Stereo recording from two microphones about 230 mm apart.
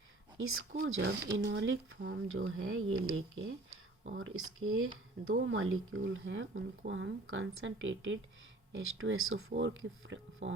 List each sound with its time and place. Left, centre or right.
0.3 s speech: right
1.0 s speech: right
9.6 s speech: right